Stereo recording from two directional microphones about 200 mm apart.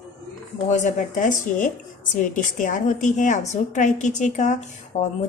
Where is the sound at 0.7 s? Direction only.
35° left (ahead or behind).